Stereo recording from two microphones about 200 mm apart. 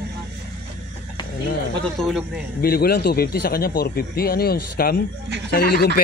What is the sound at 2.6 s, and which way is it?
Speech, 50° left (ahead or behind).